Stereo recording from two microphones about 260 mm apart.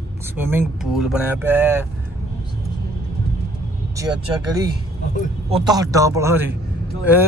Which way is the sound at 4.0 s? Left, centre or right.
Centre.